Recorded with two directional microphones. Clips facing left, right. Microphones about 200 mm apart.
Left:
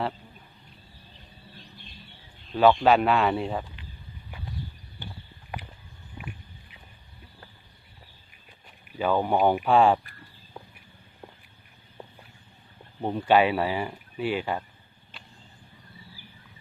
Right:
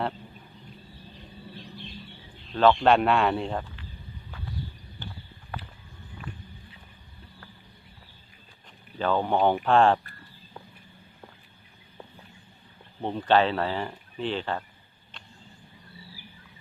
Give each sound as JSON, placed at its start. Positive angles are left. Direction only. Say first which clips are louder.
{"t": 2.5, "sound": "speech", "louder": "left 1 dB", "side_deg": 10}
{"t": 5.5, "sound": "a sound", "louder": "left 1 dB", "side_deg": 15}
{"t": 8.9, "sound": "speech", "louder": "left 1 dB", "side_deg": 10}
{"t": 13.0, "sound": "speech", "louder": "left 1 dB", "side_deg": 10}